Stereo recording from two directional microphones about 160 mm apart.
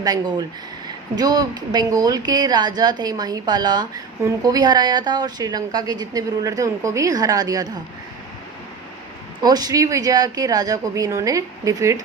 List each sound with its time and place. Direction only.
0.0 s a woman's voice: 25° right (ahead or behind)
9.4 s a woman's voice: 25° right (ahead or behind)